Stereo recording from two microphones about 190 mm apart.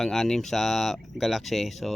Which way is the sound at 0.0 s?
Centre (ahead or behind).